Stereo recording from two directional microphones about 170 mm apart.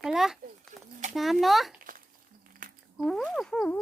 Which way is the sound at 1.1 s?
Centre (ahead or behind).